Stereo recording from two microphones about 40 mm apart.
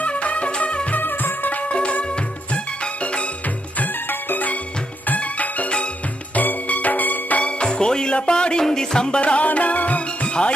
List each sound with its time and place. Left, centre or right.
0.0 s music: left
0.9 s music: left
1.6 s music: left
3.8 s music: left
7.6 s music: centre
9.2 s music: left